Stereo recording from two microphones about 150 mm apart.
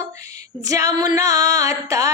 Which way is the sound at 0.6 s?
20° right (ahead or behind).